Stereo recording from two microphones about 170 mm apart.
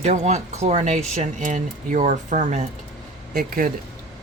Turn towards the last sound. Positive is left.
turn(degrees=-55)  # may be behind; listen again after turning